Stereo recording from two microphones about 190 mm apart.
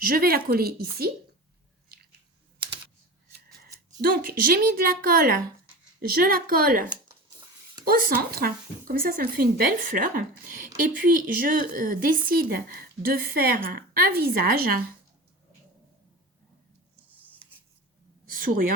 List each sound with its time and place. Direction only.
0.0 s a woman's voice: 50° right (ahead or behind)
1.9 s squish: 55° right (ahead or behind)
4.0 s a woman's voice: 50° right (ahead or behind)
18.3 s a sound: 50° right (ahead or behind)